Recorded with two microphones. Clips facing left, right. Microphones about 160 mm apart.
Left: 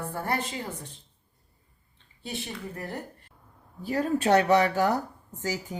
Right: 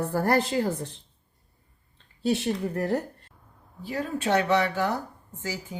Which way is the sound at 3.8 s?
45° left (ahead or behind).